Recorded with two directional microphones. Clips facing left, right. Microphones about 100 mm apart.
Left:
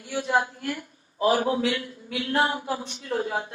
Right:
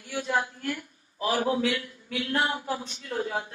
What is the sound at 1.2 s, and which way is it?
A woman's voice, 30° left (ahead or behind).